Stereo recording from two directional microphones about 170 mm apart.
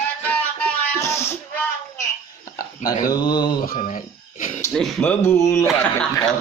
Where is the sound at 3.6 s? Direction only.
55° left (ahead or behind).